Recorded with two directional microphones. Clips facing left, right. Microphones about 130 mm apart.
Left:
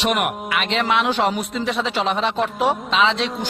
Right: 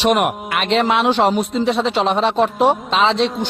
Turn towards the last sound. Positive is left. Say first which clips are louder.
# right 3 dB
turn(degrees=-35)  # may be behind; listen again after turning